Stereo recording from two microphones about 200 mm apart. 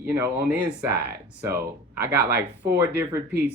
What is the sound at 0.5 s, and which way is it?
Speech, 55° right (ahead or behind).